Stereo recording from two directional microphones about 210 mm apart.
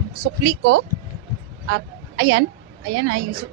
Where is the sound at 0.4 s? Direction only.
60° right (ahead or behind).